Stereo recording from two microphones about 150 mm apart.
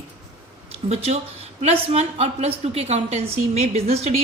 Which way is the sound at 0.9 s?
45° right (ahead or behind).